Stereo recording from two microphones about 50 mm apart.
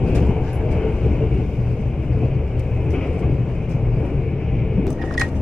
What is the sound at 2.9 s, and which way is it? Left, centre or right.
Vehicle, centre.